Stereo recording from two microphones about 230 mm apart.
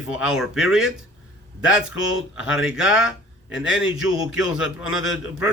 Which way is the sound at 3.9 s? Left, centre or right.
Left.